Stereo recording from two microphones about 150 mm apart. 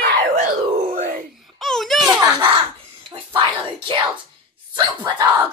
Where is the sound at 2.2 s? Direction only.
25° right (ahead or behind).